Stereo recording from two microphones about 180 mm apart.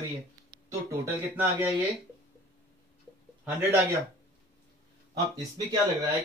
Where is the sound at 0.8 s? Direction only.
15° right (ahead or behind).